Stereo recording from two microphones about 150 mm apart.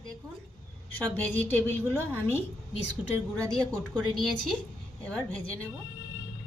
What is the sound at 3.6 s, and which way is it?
Speech, 5° left (ahead or behind).